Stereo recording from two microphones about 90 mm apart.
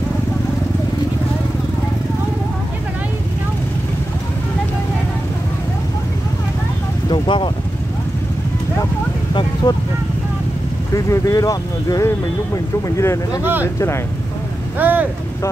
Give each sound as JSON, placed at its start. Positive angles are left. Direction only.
{"t": 7.1, "sound": "speech", "side_deg": 65}
{"t": 9.3, "sound": "a sound", "side_deg": 65}
{"t": 11.1, "sound": "speech", "side_deg": 35}
{"t": 14.8, "sound": "speech", "side_deg": -20}